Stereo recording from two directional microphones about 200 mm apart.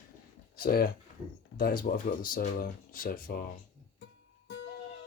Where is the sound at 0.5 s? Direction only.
45° left (ahead or behind).